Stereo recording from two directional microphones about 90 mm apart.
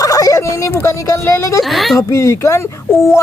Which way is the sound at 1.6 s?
Centre (ahead or behind).